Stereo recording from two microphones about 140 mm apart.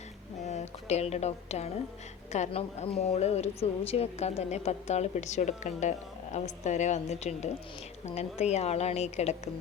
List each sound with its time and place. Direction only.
0.4 s a woman's voice: 55° left (ahead or behind)